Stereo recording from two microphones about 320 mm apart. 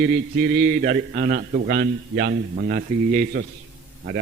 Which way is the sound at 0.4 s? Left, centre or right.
Right.